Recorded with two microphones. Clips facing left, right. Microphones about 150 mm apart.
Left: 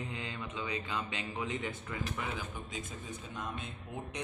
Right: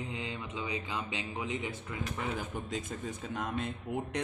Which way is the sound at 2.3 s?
65° right (ahead or behind).